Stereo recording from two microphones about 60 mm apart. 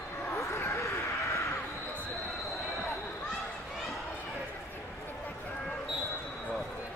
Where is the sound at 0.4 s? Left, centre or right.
Left.